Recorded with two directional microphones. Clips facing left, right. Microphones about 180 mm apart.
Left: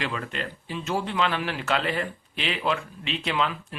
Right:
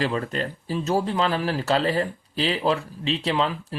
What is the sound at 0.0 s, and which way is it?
Speech, 35° right (ahead or behind).